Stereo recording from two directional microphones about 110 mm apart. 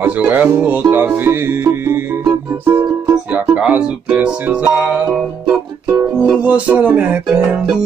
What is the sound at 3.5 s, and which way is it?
Music, 10° right (ahead or behind).